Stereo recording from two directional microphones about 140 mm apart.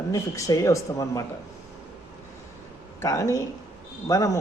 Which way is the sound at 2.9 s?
20° left (ahead or behind).